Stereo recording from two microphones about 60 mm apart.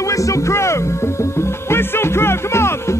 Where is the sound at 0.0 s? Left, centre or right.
Left.